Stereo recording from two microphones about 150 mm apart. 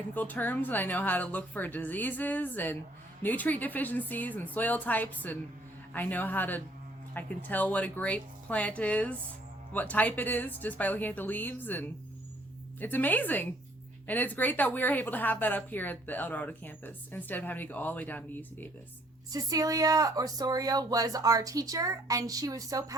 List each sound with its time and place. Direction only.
0.1 s speech: 10° left (ahead or behind)
19.3 s speech: 25° right (ahead or behind)